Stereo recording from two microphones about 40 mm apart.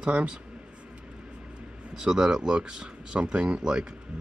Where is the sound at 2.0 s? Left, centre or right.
Centre.